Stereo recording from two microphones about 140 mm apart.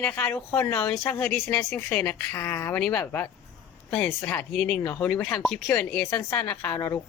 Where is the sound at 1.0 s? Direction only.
15° left (ahead or behind).